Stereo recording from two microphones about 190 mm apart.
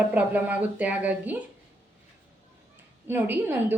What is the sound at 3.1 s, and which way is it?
Speech, 10° right (ahead or behind).